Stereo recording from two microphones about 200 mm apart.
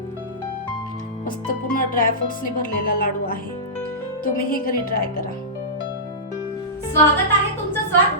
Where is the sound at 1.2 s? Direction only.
45° left (ahead or behind).